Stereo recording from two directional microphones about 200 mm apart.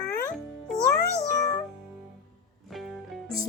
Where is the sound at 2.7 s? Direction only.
Centre (ahead or behind).